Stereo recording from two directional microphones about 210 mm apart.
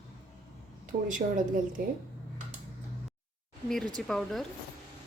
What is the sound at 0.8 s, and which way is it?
Speech, 40° right (ahead or behind).